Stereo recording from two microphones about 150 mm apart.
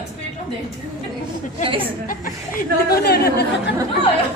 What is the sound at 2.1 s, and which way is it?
Speech, 65° left (ahead or behind).